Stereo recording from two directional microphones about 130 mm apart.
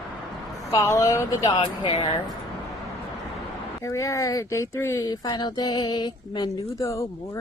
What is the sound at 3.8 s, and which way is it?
Speech, 25° left (ahead or behind).